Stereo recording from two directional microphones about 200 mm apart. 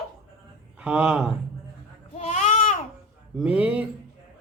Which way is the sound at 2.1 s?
35° left (ahead or behind).